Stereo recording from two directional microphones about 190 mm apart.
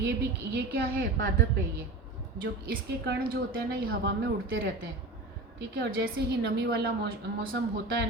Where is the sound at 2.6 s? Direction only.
50° right (ahead or behind).